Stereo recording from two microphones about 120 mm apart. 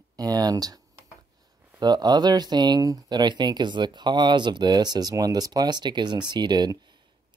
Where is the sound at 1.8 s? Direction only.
35° right (ahead or behind).